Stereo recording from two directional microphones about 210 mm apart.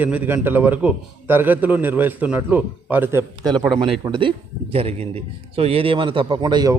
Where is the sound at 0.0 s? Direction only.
10° right (ahead or behind).